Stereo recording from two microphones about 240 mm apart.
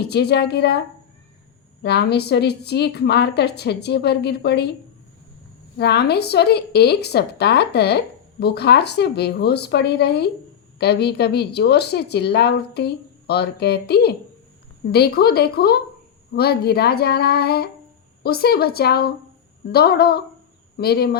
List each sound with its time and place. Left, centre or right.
0.1 s a woman's voice: left
1.8 s a woman's voice: left
5.7 s a woman's voice: left